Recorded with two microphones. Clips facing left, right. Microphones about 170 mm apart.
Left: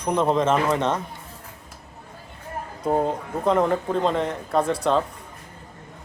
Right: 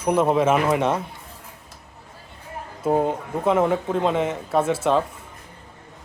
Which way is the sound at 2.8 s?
5° right (ahead or behind).